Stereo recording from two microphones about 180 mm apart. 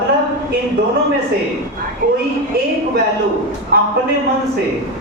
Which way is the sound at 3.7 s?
60° right (ahead or behind).